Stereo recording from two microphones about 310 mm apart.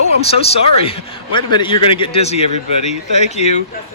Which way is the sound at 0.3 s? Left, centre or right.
Centre.